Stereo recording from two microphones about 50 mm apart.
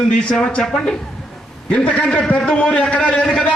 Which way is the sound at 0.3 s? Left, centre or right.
Centre.